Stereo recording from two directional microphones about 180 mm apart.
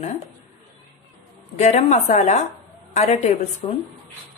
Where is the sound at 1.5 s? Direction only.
40° left (ahead or behind).